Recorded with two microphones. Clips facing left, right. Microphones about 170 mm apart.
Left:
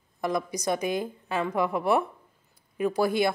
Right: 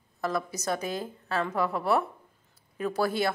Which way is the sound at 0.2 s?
15° left (ahead or behind).